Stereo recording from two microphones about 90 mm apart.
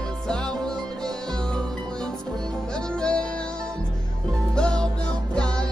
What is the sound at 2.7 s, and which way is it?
Music, 10° left (ahead or behind).